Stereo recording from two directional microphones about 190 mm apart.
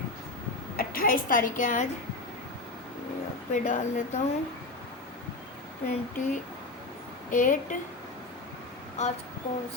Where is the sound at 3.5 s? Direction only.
40° left (ahead or behind).